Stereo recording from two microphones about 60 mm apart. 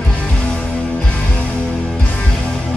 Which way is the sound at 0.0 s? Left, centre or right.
Centre.